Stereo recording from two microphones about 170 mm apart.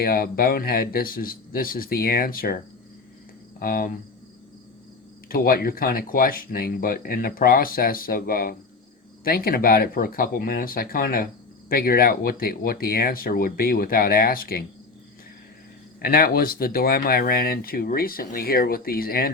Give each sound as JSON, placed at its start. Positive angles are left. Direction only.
{"t": 0.0, "sound": "speech", "side_deg": 65}
{"t": 3.6, "sound": "speech", "side_deg": 60}
{"t": 5.3, "sound": "speech", "side_deg": 60}
{"t": 16.0, "sound": "speech", "side_deg": 60}